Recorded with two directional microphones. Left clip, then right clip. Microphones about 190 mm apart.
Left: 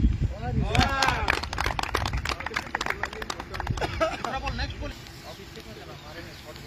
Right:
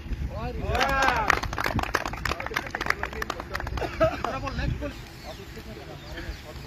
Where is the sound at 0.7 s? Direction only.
40° right (ahead or behind).